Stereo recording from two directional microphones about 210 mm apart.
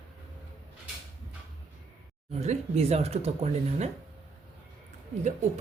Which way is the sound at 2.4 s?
30° right (ahead or behind).